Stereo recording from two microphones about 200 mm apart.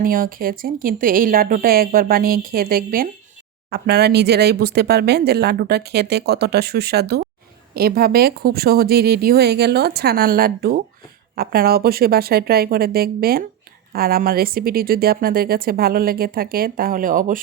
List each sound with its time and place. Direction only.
0.0 s speech: 45° right (ahead or behind)